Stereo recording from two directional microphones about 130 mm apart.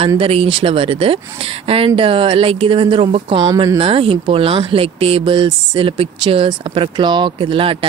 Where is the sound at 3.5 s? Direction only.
25° right (ahead or behind).